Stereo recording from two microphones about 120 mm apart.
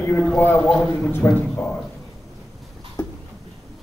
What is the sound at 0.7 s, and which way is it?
Speech, 5° left (ahead or behind).